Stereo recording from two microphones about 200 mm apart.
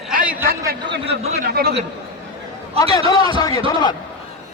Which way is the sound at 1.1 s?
55° right (ahead or behind).